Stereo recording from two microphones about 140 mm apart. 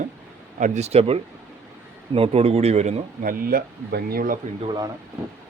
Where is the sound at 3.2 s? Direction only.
90° right.